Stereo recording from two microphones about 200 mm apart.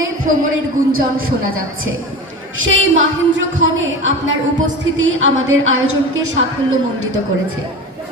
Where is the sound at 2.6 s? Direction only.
75° right (ahead or behind).